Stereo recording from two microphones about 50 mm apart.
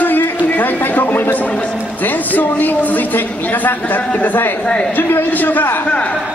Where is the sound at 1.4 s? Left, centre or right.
Left.